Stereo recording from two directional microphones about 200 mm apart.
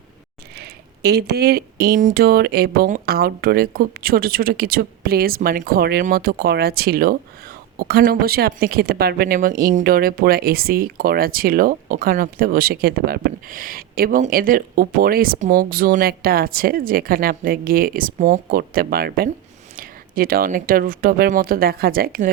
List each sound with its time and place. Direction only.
0.5 s speech: 55° right (ahead or behind)